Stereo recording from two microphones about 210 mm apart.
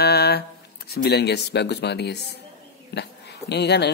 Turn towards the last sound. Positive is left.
turn(degrees=55)  # may be behind; listen again after turning